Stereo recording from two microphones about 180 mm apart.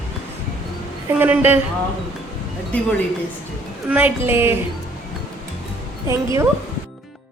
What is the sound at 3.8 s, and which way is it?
Speech, 10° right (ahead or behind).